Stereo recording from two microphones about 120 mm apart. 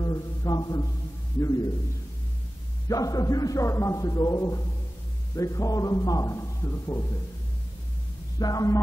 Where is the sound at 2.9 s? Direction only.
30° left (ahead or behind).